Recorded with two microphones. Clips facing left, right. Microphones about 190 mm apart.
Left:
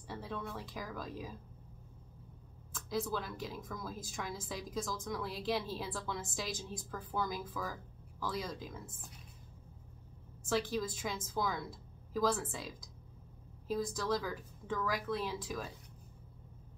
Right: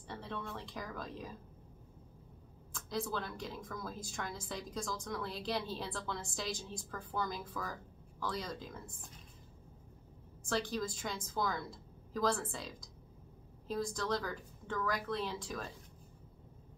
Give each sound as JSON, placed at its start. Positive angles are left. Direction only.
{"t": 0.1, "sound": "speech", "side_deg": 5}
{"t": 2.7, "sound": "a woman's voice", "side_deg": 5}
{"t": 10.5, "sound": "a woman's voice", "side_deg": 5}